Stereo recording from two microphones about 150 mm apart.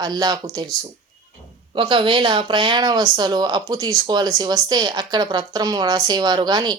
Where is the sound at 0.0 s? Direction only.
25° right (ahead or behind).